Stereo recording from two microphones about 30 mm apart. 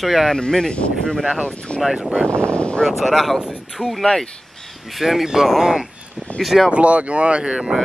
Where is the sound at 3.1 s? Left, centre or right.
Centre.